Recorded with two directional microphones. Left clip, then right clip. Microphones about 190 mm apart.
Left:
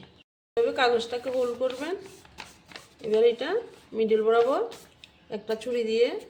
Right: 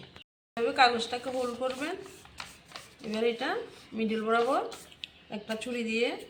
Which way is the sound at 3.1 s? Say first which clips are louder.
Left 7 dB; 45° left (ahead or behind).